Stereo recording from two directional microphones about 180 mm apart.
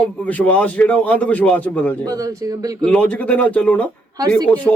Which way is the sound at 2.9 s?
10° left (ahead or behind).